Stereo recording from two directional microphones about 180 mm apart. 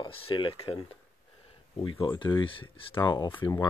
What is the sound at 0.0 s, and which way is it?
Speech, 30° left (ahead or behind).